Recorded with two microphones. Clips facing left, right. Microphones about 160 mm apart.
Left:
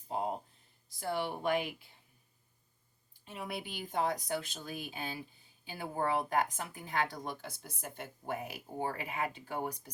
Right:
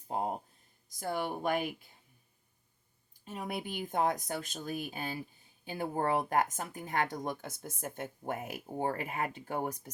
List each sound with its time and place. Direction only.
0.9 s speech: 45° right (ahead or behind)
3.2 s speech: 45° right (ahead or behind)